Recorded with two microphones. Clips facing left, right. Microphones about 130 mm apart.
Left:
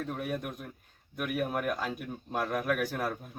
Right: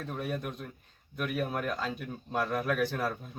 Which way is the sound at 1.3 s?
10° left (ahead or behind).